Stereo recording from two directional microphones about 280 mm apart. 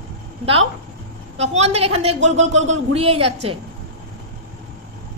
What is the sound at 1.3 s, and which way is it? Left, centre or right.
A woman's voice, right.